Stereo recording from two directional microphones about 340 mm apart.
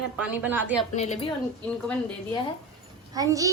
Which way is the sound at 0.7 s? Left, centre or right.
Centre.